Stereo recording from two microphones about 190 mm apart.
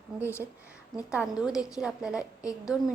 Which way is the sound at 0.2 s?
15° left (ahead or behind).